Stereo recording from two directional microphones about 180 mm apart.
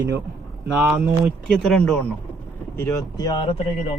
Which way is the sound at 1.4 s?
5° left (ahead or behind).